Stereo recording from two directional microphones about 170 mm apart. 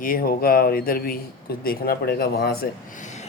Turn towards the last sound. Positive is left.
turn(degrees=45)  # may be behind; listen again after turning